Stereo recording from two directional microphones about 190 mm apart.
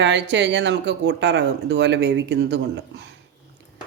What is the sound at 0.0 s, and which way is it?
Speech, 70° right (ahead or behind).